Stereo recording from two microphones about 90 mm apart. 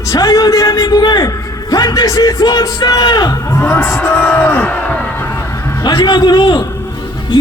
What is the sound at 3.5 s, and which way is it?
Speech, 30° left (ahead or behind).